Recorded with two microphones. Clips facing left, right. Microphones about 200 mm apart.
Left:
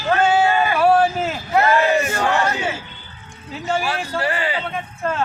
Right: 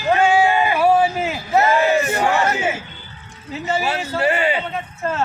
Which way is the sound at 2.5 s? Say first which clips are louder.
Right 3 dB; 20° right (ahead or behind).